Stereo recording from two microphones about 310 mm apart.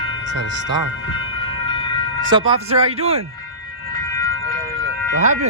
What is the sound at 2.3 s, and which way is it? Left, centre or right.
Speech, centre.